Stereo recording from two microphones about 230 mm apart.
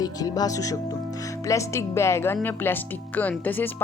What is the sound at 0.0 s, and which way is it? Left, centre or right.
Speech, centre.